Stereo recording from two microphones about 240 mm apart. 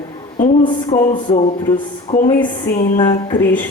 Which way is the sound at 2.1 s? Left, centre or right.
Left.